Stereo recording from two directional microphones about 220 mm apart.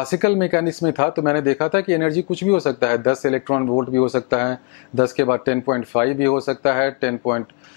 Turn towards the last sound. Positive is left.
turn(degrees=20)  # may be behind; listen again after turning